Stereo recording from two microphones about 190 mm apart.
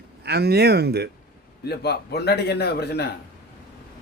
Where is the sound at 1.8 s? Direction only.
60° left (ahead or behind).